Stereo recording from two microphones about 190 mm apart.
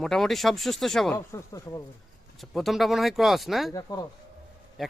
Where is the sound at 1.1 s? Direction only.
15° left (ahead or behind).